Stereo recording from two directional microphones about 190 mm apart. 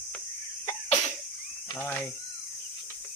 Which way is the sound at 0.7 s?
35° left (ahead or behind).